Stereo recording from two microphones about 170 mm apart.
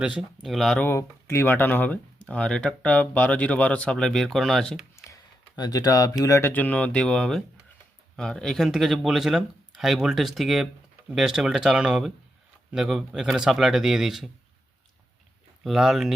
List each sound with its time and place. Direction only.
0.0 s speech: 5° right (ahead or behind)
0.9 s speech: 15° left (ahead or behind)
5.0 s speech: 20° left (ahead or behind); by 14.3 s centre (ahead or behind)
15.6 s speech: centre (ahead or behind)